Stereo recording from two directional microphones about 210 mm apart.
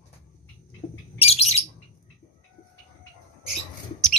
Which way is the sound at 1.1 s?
30° left (ahead or behind).